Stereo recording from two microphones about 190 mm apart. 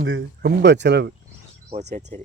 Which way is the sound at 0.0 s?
80° right.